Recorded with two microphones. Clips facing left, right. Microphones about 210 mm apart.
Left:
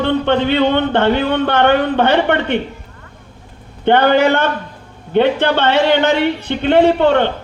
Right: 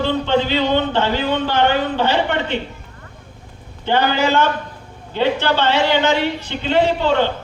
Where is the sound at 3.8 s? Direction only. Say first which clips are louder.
Left 6 dB; 60° left (ahead or behind).